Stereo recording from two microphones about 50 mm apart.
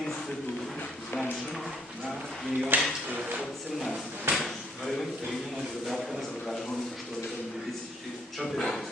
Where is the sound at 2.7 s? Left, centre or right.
Right.